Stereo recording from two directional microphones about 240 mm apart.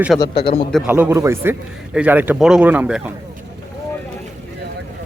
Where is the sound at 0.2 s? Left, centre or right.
Left.